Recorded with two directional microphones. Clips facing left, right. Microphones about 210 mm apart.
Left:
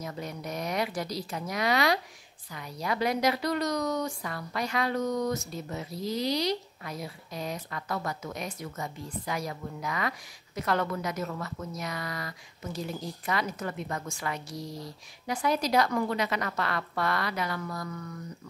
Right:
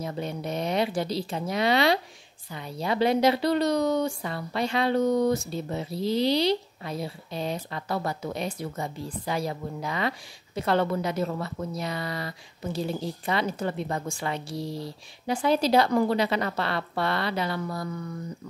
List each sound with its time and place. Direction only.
0.0 s speech: 30° right (ahead or behind)